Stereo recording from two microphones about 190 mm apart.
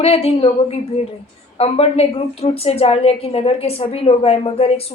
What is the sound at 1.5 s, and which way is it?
A woman's voice, 30° left (ahead or behind).